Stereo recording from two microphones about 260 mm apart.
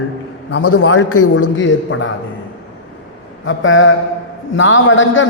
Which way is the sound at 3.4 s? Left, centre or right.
Left.